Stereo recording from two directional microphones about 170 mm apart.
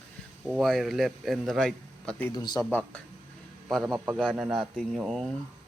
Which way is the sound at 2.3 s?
25° left (ahead or behind).